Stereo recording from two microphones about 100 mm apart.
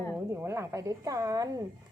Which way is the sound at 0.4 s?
30° right (ahead or behind).